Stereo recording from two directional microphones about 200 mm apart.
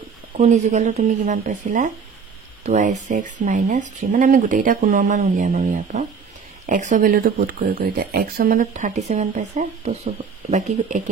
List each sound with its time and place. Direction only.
0.4 s speech: 35° right (ahead or behind)